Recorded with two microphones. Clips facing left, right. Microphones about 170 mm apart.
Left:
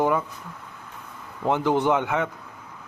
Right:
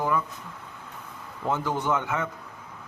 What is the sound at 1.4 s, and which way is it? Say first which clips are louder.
Speech: left 6 dB; 20° left (ahead or behind).